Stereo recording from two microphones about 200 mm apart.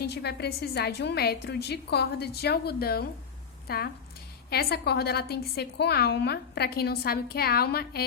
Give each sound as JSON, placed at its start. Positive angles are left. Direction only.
{"t": 0.0, "sound": "a woman's voice", "side_deg": 55}